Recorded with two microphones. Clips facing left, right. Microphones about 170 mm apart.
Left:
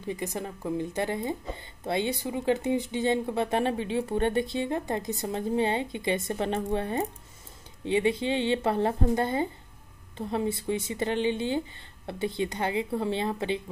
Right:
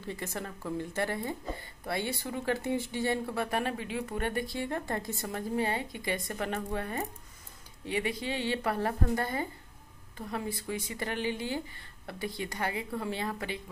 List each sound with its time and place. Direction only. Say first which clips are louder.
0.0 s a woman's voice: left 5 dB; 15° left (ahead or behind)